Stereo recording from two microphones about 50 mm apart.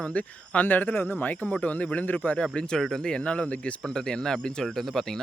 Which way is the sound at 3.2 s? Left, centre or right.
Left.